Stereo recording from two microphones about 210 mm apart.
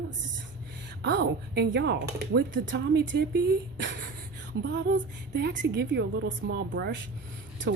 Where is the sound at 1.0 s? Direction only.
50° right (ahead or behind).